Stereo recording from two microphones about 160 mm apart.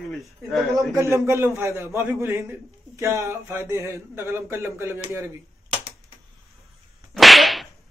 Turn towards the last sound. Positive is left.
turn(degrees=0)  # may be behind; listen again after turning